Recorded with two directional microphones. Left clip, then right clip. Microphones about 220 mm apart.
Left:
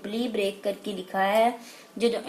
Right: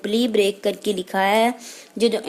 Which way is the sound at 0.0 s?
45° right (ahead or behind).